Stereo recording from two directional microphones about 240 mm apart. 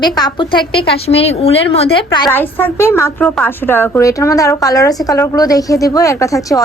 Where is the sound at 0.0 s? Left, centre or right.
Centre.